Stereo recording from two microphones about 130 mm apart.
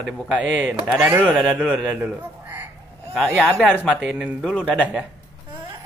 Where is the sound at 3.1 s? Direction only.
5° left (ahead or behind).